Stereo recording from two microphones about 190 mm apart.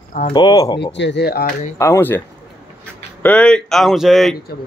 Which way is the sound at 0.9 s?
70° left (ahead or behind).